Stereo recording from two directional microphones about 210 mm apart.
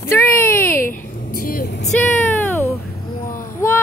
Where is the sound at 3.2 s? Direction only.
40° left (ahead or behind).